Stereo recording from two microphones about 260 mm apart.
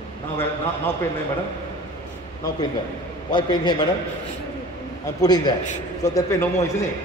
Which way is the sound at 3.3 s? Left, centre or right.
Centre.